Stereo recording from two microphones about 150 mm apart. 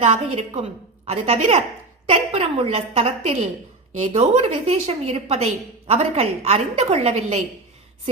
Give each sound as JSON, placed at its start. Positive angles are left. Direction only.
{"t": 0.0, "sound": "a woman's voice", "side_deg": -45}